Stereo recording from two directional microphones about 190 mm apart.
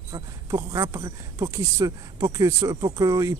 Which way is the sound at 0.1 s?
20° right (ahead or behind).